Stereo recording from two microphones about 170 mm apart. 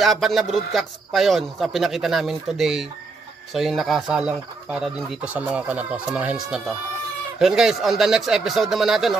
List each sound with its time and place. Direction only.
0.0 s speech: centre (ahead or behind)